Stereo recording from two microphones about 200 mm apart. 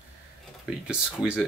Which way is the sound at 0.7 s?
5° right (ahead or behind).